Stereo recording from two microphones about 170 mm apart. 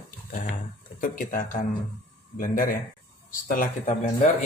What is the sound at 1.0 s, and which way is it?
Speech, 50° left (ahead or behind).